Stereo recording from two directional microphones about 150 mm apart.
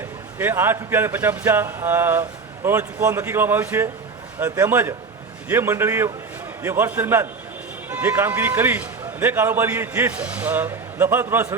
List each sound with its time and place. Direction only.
0.3 s a man's voice: 15° right (ahead or behind)